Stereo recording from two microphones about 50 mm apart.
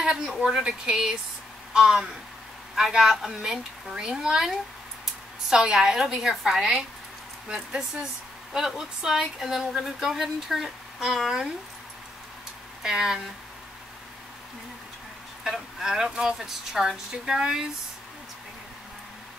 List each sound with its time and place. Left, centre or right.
0.0 s speech: centre
1.7 s a sound: centre
2.7 s speech: centre
12.8 s speech: centre
15.8 s speech: centre